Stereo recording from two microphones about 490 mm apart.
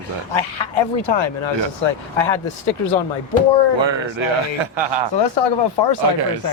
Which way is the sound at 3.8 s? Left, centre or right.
Right.